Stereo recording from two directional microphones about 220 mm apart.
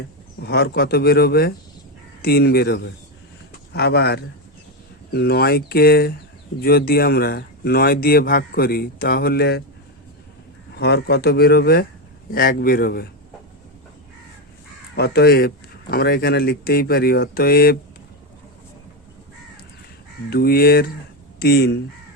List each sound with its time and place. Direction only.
0.4 s speech: 45° left (ahead or behind)
10.8 s speech: 50° left (ahead or behind)
14.9 s speech: 45° left (ahead or behind)
20.3 s speech: 45° left (ahead or behind)